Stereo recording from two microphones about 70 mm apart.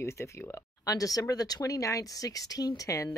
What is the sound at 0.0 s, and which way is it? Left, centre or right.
Speech, left.